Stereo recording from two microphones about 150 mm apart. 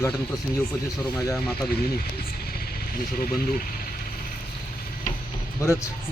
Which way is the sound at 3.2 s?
70° left (ahead or behind).